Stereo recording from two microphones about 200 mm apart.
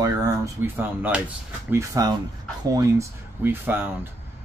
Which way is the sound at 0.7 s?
10° right (ahead or behind).